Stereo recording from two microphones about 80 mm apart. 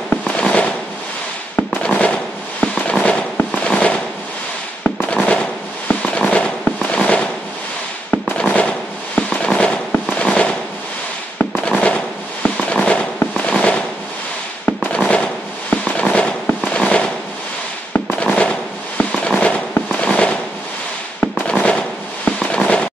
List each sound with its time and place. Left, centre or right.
0.1 s fireworks: centre
5.0 s fireworks: centre
18.1 s fireworks: centre